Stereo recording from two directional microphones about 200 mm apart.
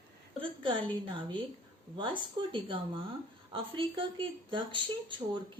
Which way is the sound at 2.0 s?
25° right (ahead or behind).